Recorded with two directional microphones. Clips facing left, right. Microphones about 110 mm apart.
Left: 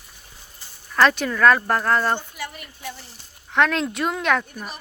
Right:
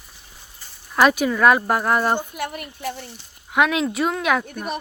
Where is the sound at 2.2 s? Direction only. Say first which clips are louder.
Right 6 dB; 55° right (ahead or behind).